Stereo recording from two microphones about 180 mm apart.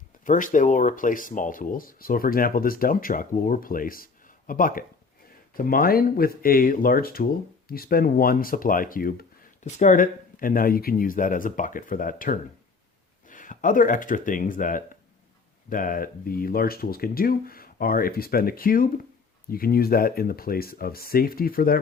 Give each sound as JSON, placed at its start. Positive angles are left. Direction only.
{"t": 0.3, "sound": "speech", "side_deg": 45}